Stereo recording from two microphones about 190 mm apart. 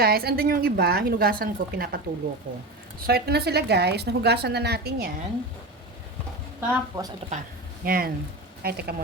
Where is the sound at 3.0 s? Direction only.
55° right (ahead or behind).